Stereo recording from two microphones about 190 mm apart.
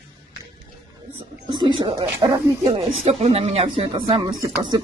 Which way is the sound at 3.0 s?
35° right (ahead or behind).